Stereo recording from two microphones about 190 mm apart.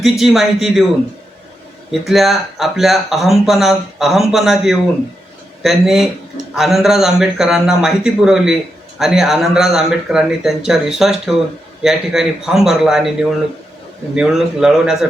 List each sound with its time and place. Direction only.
0.0 s speech: centre (ahead or behind)
1.9 s speech: centre (ahead or behind)
14.2 s speech: centre (ahead or behind)